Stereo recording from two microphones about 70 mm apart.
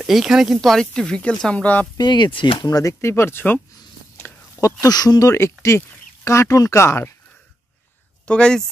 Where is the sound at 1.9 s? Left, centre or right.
Left.